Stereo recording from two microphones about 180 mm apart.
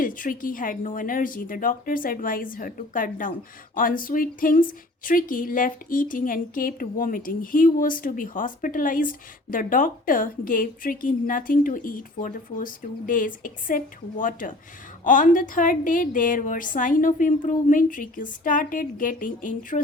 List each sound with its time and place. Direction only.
0.0 s a woman's voice: 50° left (ahead or behind)